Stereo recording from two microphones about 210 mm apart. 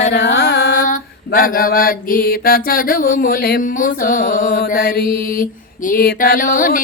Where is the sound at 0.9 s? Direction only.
40° left (ahead or behind).